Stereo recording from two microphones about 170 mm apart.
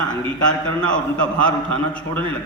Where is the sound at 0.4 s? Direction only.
5° left (ahead or behind).